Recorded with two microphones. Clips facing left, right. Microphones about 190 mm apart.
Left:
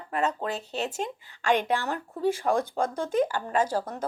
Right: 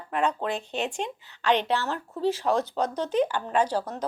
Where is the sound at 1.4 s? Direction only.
10° left (ahead or behind).